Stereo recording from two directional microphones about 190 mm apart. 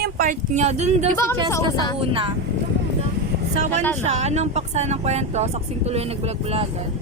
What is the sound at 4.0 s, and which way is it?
Speech, 35° right (ahead or behind).